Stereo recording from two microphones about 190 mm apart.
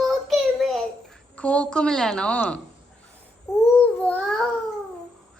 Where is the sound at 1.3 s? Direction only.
5° left (ahead or behind).